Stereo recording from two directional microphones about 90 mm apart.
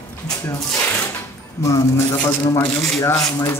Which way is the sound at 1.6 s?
35° left (ahead or behind).